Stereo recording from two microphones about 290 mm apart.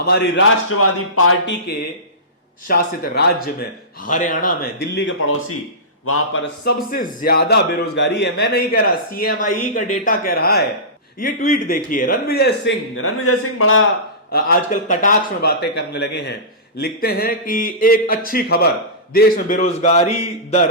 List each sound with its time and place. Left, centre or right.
0.0 s a man's voice: left
2.6 s a man's voice: left
6.7 s a man's voice: left
14.3 s a man's voice: left